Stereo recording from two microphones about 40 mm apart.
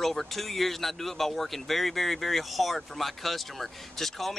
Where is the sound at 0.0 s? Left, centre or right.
Centre.